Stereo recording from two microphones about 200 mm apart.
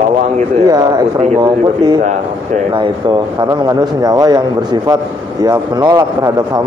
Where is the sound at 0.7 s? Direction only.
20° right (ahead or behind).